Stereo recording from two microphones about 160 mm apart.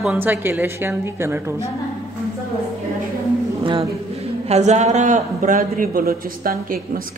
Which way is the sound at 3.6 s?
35° right (ahead or behind).